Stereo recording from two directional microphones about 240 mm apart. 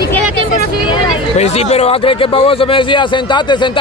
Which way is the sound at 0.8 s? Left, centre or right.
Left.